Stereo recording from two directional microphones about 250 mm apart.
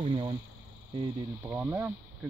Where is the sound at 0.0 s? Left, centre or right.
Right.